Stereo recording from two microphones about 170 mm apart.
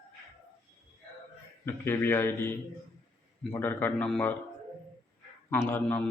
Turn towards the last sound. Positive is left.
turn(degrees=15)  # may be behind; listen again after turning